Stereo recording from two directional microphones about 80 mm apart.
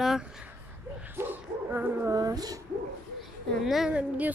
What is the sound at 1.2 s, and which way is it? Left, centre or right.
Dog, right.